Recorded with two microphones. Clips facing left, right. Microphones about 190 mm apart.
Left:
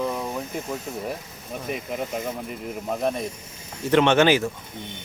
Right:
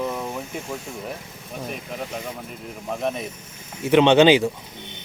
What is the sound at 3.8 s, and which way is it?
Speech, 15° right (ahead or behind).